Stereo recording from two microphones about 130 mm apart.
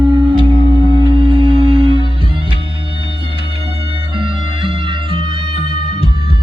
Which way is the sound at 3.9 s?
40° right (ahead or behind).